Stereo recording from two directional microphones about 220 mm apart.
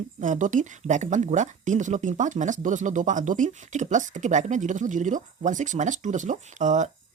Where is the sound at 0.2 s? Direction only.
35° right (ahead or behind).